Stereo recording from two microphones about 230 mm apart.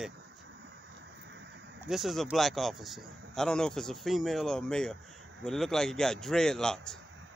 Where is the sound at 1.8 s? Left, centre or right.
Centre.